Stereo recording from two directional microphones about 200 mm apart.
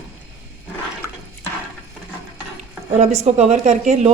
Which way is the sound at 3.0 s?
35° right (ahead or behind).